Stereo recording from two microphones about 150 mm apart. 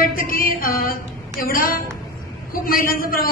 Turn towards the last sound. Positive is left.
turn(degrees=75)  # may be behind; listen again after turning